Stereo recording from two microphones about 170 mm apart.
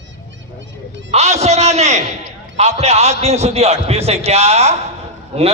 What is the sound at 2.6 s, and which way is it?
A man's voice, 40° right (ahead or behind).